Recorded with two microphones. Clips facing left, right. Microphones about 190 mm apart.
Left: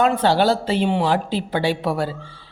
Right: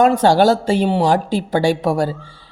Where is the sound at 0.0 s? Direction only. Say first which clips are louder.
Right 5 dB; 45° right (ahead or behind).